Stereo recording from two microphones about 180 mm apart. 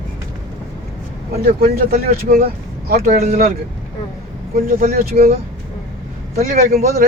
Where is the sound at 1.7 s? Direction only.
55° right (ahead or behind).